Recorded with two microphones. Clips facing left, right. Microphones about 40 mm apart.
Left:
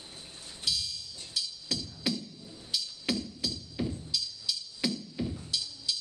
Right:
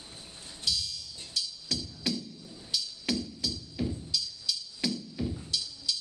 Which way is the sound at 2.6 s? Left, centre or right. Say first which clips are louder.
Even; centre.